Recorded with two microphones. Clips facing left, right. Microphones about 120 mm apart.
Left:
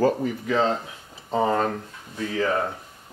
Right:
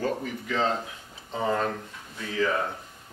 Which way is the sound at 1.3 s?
35° left (ahead or behind).